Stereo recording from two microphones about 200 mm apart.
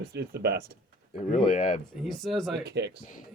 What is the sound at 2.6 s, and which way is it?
Speech, 55° right (ahead or behind).